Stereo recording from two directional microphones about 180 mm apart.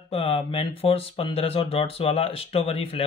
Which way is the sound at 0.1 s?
30° left (ahead or behind).